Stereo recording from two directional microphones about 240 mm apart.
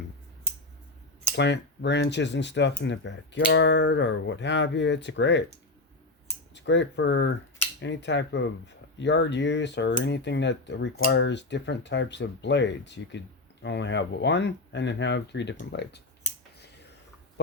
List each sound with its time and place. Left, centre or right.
1.4 s speech: left
6.5 s speech: left